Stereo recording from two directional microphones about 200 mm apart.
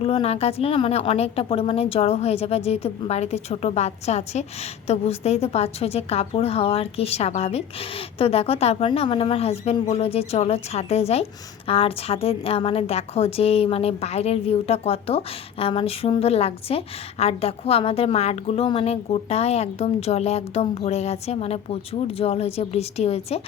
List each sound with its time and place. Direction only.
0.0 s a woman's voice: 30° left (ahead or behind)